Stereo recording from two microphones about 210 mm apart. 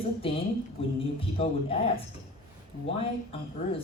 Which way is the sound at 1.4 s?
25° left (ahead or behind).